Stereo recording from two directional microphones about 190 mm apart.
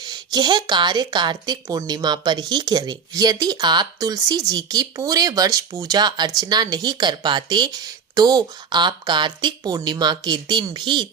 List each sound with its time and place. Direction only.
0.0 s speech: 20° right (ahead or behind)